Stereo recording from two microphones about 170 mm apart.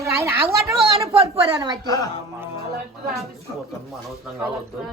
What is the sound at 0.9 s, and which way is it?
Speech, 35° right (ahead or behind).